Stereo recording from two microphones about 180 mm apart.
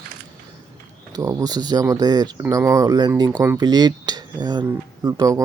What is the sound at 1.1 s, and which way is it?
Speech, 20° right (ahead or behind).